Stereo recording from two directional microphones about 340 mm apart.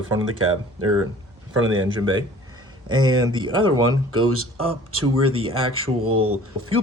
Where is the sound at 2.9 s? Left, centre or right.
Centre.